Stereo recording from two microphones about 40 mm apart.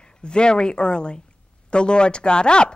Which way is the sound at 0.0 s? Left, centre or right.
Left.